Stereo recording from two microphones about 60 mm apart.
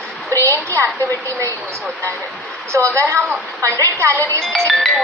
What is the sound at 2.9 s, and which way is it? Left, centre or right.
A woman's voice, right.